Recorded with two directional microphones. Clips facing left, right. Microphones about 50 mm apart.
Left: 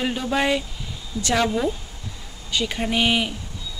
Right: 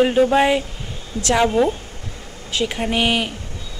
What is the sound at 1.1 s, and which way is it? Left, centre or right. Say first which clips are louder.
Speech: right 3 dB; right.